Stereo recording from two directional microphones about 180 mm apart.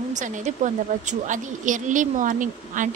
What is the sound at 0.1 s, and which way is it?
Speech, 45° right (ahead or behind).